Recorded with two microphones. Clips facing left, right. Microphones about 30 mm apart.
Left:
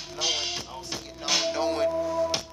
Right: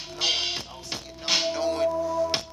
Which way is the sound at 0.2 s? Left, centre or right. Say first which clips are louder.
Right 2 dB; right.